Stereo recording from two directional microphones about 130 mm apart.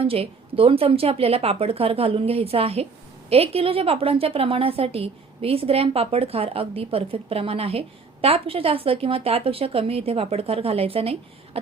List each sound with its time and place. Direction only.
0.0 s a woman's voice: 50° right (ahead or behind)